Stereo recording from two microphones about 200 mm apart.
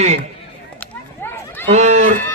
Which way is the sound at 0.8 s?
10° left (ahead or behind).